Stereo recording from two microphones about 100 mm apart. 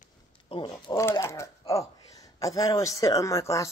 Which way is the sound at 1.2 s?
30° left (ahead or behind).